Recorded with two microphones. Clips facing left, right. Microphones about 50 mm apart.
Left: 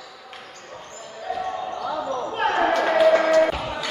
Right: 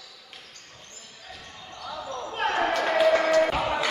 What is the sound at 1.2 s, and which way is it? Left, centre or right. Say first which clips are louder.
Basketball bounce: left 18 dB; left.